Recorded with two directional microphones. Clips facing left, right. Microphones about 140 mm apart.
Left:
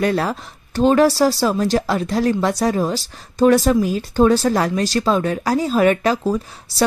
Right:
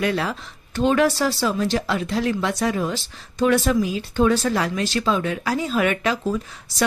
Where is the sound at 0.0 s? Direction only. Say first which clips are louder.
Left 4 dB; 40° left (ahead or behind).